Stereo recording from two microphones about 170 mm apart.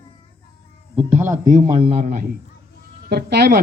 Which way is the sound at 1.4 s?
25° right (ahead or behind).